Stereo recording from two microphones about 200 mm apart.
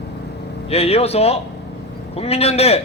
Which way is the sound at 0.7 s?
30° left (ahead or behind).